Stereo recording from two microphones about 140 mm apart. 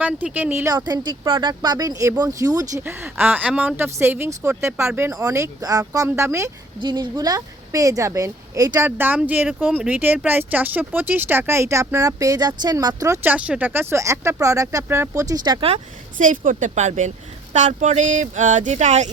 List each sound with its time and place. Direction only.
0.0 s speech: 10° right (ahead or behind)
6.7 s speech: 30° right (ahead or behind)
9.0 s speech: 10° right (ahead or behind); by 12.9 s 30° right (ahead or behind)
13.2 s speech: 10° right (ahead or behind); by 15.6 s 25° right (ahead or behind)
16.1 s speech: 65° right (ahead or behind)